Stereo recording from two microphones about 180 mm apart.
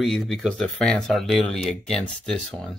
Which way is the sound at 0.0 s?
Centre (ahead or behind).